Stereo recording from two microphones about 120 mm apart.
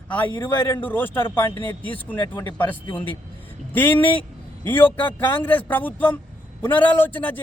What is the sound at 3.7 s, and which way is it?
Speech, 15° left (ahead or behind).